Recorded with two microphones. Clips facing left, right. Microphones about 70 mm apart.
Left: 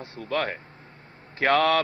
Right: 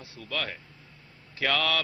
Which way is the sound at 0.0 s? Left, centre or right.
Left.